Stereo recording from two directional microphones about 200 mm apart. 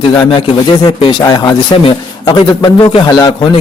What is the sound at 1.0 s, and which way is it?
A man's voice, 20° left (ahead or behind).